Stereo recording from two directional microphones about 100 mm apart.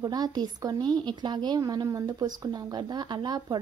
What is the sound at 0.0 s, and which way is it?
A woman's voice, 40° right (ahead or behind).